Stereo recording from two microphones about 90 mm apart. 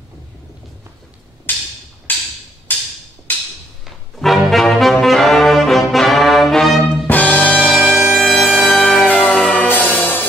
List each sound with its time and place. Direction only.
1.5 s music: 20° left (ahead or behind)
3.8 s brass instrument: centre (ahead or behind)
7.1 s music: 15° left (ahead or behind)
7.7 s bagpipes: centre (ahead or behind)
8.5 s music: 5° left (ahead or behind)